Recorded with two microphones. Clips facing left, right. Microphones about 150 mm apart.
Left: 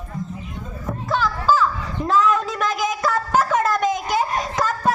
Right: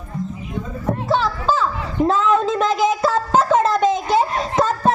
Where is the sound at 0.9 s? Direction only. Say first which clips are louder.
Right 3 dB; 25° right (ahead or behind).